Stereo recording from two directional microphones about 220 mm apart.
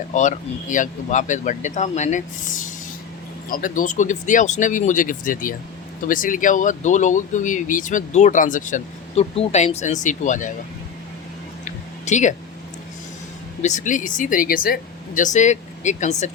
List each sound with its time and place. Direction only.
0.1 s speech: 35° left (ahead or behind)
11.6 s a sound: 35° left (ahead or behind)
13.6 s speech: 35° left (ahead or behind)